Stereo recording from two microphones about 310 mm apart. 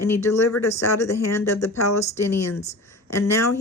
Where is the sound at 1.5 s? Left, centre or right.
Centre.